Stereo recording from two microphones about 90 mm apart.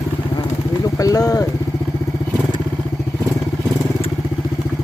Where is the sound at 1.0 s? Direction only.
40° left (ahead or behind).